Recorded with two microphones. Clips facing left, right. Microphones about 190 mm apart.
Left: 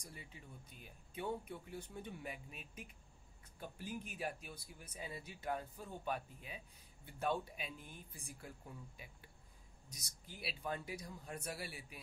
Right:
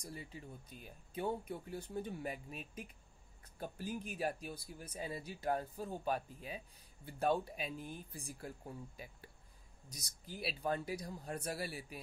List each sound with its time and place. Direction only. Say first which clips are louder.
0.0 s speech: right 7 dB; 35° right (ahead or behind)